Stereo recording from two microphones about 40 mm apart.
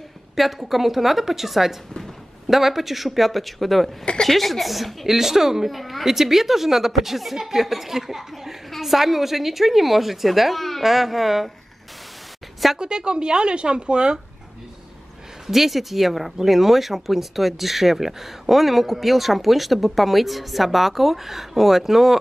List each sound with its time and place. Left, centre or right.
0.4 s speech: centre
12.7 s a woman's voice: right
15.4 s speech: centre